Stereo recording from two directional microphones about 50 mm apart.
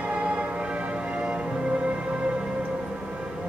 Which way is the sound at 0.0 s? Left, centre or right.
Right.